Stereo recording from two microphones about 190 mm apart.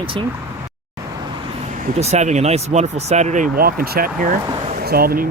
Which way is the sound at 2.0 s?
35° right (ahead or behind).